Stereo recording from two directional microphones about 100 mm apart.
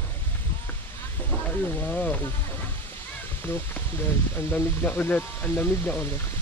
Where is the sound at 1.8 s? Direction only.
15° left (ahead or behind).